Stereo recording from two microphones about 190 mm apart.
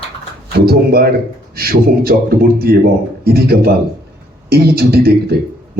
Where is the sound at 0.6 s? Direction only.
55° right (ahead or behind).